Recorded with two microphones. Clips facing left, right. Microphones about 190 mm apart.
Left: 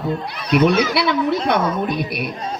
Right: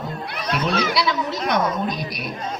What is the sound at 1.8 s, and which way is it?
Speech, 60° left (ahead or behind).